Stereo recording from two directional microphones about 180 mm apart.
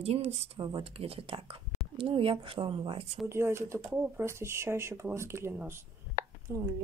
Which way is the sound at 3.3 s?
15° right (ahead or behind).